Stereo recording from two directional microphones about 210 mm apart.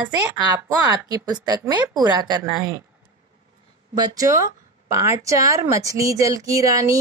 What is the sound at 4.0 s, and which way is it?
A woman's voice, 15° right (ahead or behind).